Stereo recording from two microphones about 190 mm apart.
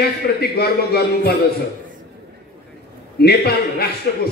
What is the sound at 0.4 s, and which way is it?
Speech, 55° left (ahead or behind).